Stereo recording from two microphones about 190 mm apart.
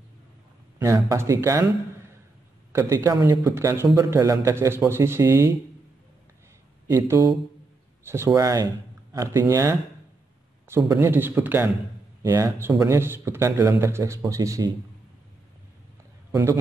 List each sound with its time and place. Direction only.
0.7 s a man's voice: 15° right (ahead or behind)
2.7 s a man's voice: 15° right (ahead or behind)
6.9 s a man's voice: 15° right (ahead or behind)
16.3 s a sound: 15° right (ahead or behind)